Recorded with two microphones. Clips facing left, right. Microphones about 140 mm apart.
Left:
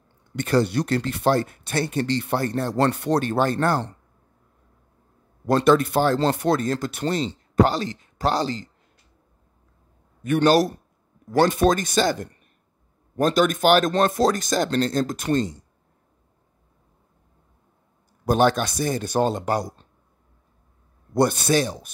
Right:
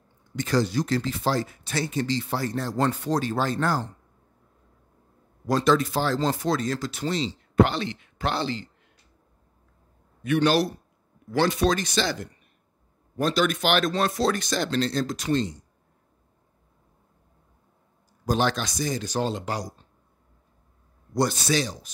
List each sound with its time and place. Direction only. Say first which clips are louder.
0.4 s speech: left 3 dB; 60° left (ahead or behind)
5.5 s speech: left 4 dB; 55° left (ahead or behind)
7.6 s speech: left 4 dB; 40° left (ahead or behind)
10.2 s speech: left 4 dB; 45° left (ahead or behind)
18.2 s speech: left 5 dB; 55° left (ahead or behind)
21.1 s speech: left 4 dB; 55° left (ahead or behind)